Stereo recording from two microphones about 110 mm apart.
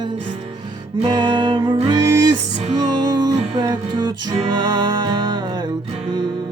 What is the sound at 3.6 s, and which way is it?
Music, 45° right (ahead or behind).